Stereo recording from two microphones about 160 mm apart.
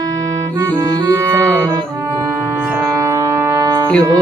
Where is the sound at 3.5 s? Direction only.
20° right (ahead or behind).